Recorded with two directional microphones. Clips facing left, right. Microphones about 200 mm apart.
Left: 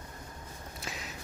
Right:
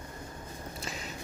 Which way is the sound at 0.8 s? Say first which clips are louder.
Right 1 dB; centre (ahead or behind).